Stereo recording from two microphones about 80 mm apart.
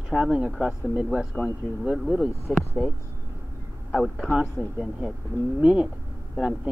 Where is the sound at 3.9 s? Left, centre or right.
Centre.